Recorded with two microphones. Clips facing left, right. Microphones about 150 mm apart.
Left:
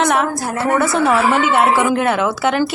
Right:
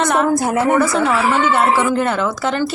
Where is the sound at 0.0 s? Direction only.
Centre (ahead or behind).